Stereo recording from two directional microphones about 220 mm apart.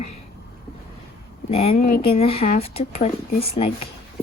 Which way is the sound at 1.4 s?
25° left (ahead or behind).